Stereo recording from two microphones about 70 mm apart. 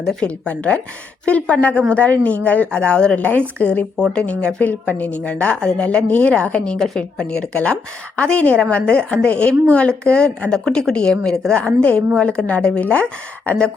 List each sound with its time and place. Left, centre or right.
0.0 s a woman's voice: centre
3.2 s a woman's voice: left